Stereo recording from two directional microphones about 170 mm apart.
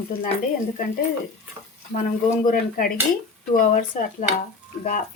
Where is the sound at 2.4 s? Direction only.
55° left (ahead or behind).